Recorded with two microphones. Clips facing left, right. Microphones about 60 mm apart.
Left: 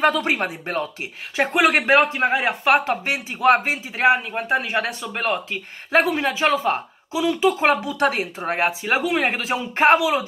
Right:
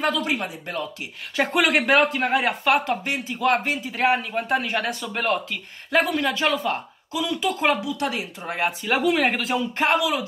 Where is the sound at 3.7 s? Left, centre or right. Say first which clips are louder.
Left 3 dB; centre; by 8.7 s left.